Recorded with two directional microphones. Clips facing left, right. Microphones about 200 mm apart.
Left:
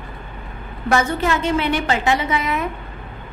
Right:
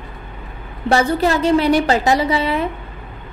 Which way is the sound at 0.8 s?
35° right (ahead or behind).